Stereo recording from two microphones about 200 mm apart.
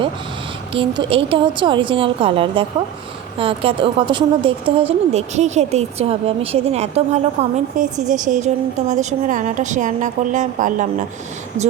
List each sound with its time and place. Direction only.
0.7 s a woman's voice: 25° right (ahead or behind)